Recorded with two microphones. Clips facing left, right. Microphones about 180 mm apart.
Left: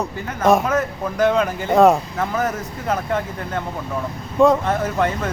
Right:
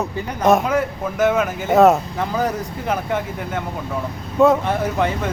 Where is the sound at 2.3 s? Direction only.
15° right (ahead or behind).